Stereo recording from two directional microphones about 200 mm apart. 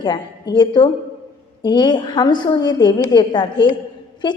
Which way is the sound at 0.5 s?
20° left (ahead or behind).